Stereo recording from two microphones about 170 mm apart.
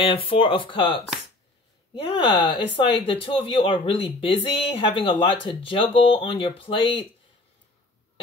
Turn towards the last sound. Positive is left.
turn(degrees=30)  # may be behind; listen again after turning